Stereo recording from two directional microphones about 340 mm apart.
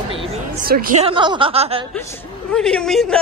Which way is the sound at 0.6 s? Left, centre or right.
Right.